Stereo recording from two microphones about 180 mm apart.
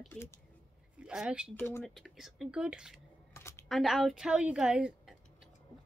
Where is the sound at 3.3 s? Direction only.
15° left (ahead or behind).